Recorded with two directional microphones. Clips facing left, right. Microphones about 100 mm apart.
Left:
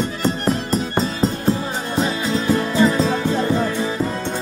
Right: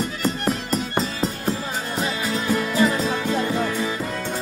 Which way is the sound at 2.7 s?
30° left (ahead or behind).